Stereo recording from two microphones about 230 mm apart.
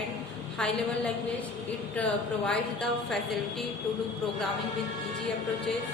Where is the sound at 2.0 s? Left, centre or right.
Centre.